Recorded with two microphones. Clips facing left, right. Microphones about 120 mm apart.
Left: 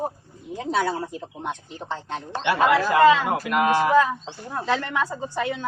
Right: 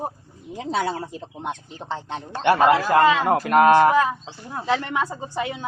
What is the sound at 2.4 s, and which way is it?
Speech, 50° right (ahead or behind).